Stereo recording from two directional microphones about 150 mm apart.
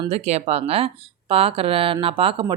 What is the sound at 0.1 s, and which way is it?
Speech, 45° right (ahead or behind).